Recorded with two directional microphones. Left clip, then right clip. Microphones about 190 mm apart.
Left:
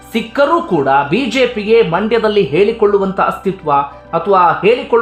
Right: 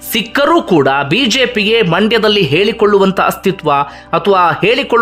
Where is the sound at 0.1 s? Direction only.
25° right (ahead or behind).